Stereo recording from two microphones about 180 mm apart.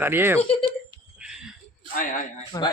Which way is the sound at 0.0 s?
10° right (ahead or behind).